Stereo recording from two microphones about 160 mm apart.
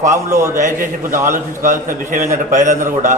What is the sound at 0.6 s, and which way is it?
A man's voice, 55° right (ahead or behind).